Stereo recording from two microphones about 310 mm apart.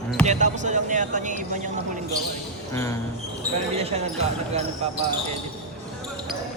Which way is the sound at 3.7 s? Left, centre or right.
Centre.